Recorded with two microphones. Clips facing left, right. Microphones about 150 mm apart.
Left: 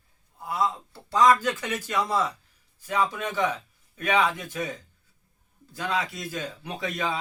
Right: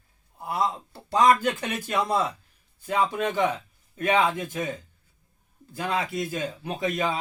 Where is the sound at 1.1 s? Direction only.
55° right (ahead or behind).